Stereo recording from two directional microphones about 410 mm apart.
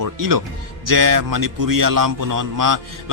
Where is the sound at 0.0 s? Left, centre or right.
Right.